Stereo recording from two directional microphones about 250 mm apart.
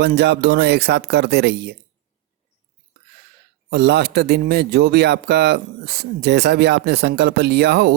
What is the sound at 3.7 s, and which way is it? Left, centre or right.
A man's voice, right.